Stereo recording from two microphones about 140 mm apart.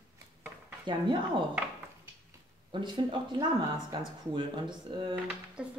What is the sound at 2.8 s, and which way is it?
Speech, 35° right (ahead or behind).